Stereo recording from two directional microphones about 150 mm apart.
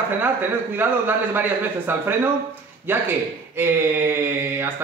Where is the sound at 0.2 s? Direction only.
15° right (ahead or behind).